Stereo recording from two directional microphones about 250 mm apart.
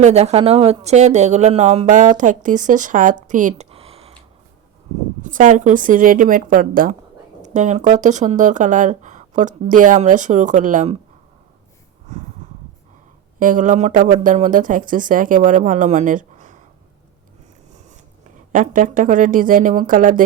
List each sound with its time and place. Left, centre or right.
0.0 s speech: right
5.3 s speech: right
13.4 s speech: right
18.5 s speech: right